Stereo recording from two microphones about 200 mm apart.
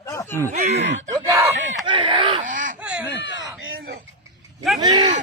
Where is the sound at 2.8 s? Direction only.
5° right (ahead or behind).